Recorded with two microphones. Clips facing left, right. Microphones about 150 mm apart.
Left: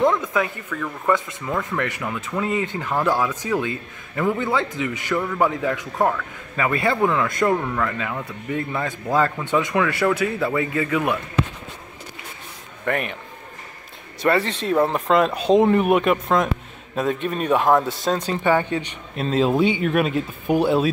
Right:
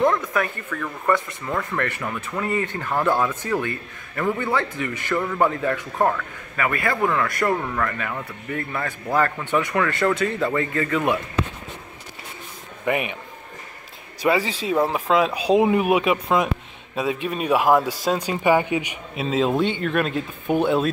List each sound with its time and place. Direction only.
0.3 s a man's voice: 20° left (ahead or behind)
0.7 s speech: centre (ahead or behind)
2.4 s speech: 20° left (ahead or behind)
5.1 s speech: centre (ahead or behind)
5.4 s speech: 10° left (ahead or behind)
5.9 s speech: centre (ahead or behind)
6.5 s a man's voice: 25° left (ahead or behind)
7.5 s speech: centre (ahead or behind)
12.8 s a man's voice: 10° right (ahead or behind)
14.2 s speech: 5° right (ahead or behind)